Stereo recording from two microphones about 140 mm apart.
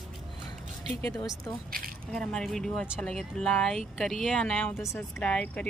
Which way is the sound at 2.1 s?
5° left (ahead or behind).